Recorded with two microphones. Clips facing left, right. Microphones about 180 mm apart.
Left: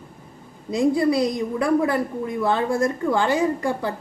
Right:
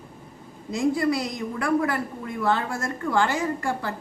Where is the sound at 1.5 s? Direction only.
20° left (ahead or behind).